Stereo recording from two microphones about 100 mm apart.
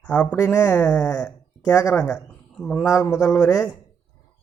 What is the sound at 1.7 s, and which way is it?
Speech, 30° left (ahead or behind).